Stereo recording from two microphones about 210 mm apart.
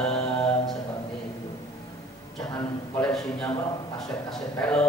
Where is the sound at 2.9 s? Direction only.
5° left (ahead or behind).